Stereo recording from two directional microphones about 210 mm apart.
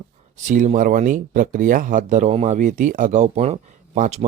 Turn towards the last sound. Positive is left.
turn(degrees=-35)  # may be behind; listen again after turning